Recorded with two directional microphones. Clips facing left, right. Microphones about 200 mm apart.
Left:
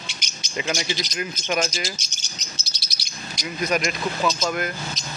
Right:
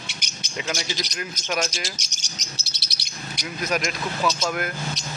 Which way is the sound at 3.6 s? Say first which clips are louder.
Left 2 dB; centre (ahead or behind).